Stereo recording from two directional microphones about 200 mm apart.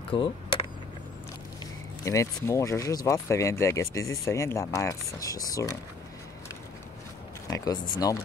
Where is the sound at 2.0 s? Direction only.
15° left (ahead or behind).